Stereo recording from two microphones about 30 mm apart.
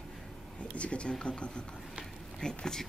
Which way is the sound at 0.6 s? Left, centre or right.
Left.